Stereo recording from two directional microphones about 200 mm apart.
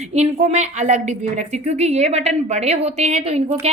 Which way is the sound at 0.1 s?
35° right (ahead or behind).